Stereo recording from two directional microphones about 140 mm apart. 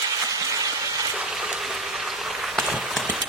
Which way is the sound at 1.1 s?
5° right (ahead or behind).